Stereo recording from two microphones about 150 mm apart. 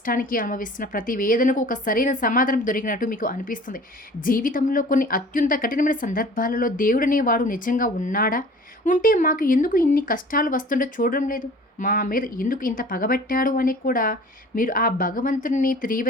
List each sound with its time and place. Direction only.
0.0 s a woman's voice: 65° left (ahead or behind)